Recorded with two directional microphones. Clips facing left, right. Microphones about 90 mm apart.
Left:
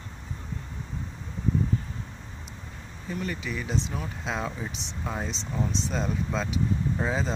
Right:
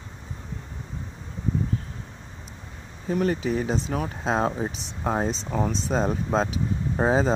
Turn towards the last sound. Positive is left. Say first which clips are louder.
# right 6 dB
turn(degrees=-40)  # may be behind; listen again after turning